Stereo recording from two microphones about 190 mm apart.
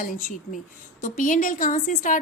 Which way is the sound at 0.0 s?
45° left (ahead or behind).